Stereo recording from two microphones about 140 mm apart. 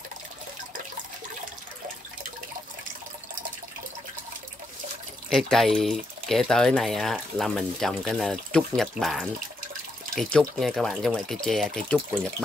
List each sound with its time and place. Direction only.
5.5 s speech: centre (ahead or behind)